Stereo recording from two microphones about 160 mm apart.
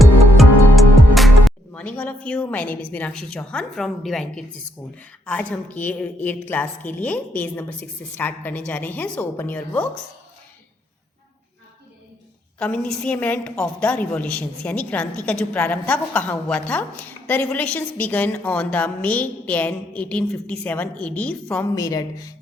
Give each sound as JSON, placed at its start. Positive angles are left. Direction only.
{"t": 0.0, "sound": "music", "side_deg": 0}
{"t": 4.9, "sound": "a woman's voice", "side_deg": 10}
{"t": 12.5, "sound": "a woman's voice", "side_deg": 5}
{"t": 21.8, "sound": "speech", "side_deg": 20}